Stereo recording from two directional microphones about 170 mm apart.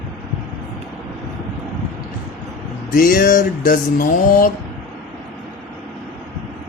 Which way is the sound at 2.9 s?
55° left (ahead or behind).